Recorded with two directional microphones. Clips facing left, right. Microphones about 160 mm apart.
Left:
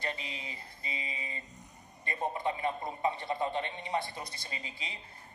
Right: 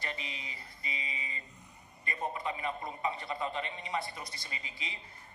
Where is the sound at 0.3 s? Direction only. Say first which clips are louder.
Left 2 dB; 30° left (ahead or behind).